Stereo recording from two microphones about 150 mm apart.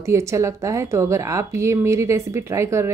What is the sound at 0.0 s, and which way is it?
A woman's voice, 20° right (ahead or behind).